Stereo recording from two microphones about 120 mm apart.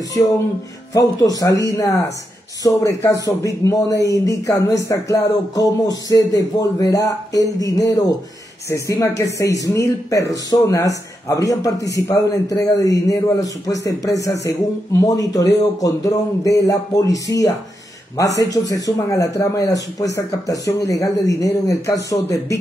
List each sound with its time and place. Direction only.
0.9 s speech: 30° left (ahead or behind)